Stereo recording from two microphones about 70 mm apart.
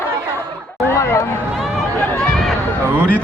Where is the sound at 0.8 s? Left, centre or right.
Left.